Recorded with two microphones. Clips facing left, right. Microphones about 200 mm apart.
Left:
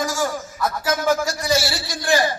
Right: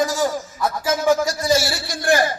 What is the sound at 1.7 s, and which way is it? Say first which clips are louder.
Speech: right 2 dB; 55° right (ahead or behind).